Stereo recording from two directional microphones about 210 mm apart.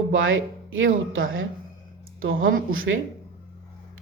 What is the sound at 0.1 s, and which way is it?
Speech, 70° right (ahead or behind).